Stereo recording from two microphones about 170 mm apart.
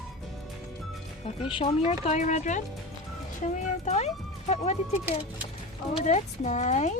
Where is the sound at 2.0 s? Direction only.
45° left (ahead or behind).